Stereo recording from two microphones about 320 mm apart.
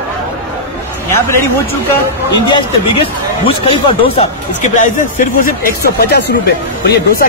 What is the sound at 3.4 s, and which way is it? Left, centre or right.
Speech, centre.